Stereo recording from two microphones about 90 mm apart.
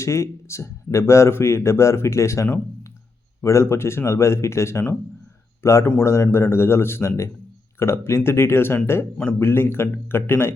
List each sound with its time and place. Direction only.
0.0 s speech: 35° left (ahead or behind)